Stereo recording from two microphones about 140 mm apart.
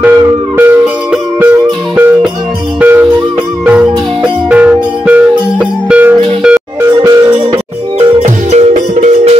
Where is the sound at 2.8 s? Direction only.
15° right (ahead or behind).